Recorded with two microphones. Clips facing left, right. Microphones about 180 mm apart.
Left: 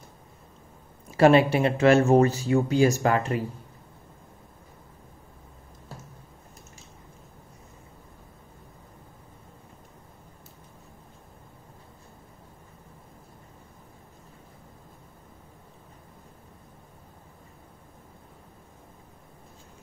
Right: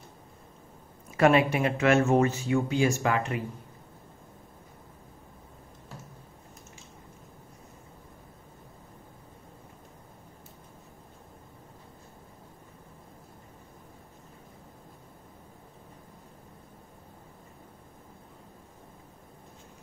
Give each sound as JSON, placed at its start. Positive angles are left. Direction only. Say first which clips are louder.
{"t": 1.1, "sound": "speech", "louder": "left 4 dB", "side_deg": 30}